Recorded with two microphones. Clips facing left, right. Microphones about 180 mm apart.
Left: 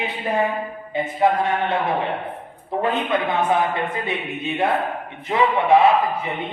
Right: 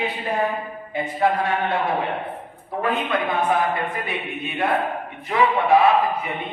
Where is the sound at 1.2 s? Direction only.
20° left (ahead or behind).